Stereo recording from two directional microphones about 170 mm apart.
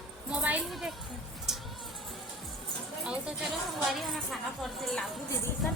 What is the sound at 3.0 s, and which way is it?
A woman's voice, 5° right (ahead or behind).